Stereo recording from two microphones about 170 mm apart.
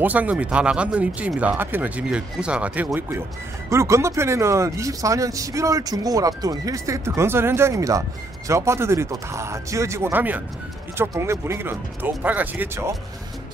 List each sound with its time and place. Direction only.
0.0 s speech: 10° right (ahead or behind)